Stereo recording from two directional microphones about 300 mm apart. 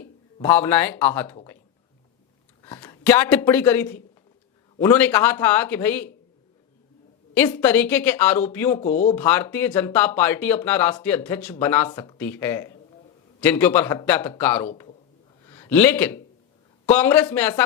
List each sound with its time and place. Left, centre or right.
0.3 s speech: centre
2.6 s speech: centre
7.5 s speech: centre
8.8 s speech: left
9.1 s speech: centre